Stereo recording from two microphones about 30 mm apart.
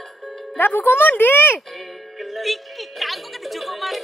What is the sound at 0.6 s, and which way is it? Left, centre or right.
Speech, left.